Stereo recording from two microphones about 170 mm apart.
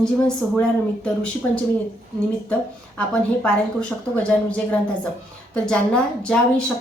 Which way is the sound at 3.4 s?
5° left (ahead or behind).